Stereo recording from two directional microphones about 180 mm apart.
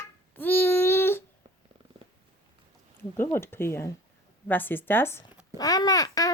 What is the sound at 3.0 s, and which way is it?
Babbling, 15° left (ahead or behind).